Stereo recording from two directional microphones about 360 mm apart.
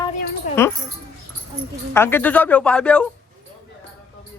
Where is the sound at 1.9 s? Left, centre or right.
Centre.